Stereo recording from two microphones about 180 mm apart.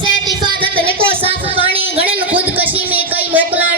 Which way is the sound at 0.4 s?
30° right (ahead or behind).